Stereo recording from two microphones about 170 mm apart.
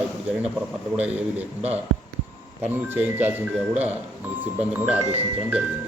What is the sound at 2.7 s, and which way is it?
A man's voice, 10° right (ahead or behind).